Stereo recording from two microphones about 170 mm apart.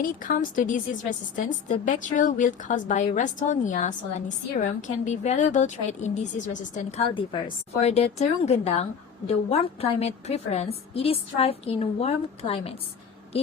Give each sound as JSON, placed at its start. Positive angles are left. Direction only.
{"t": 0.0, "sound": "a woman's voice", "side_deg": 55}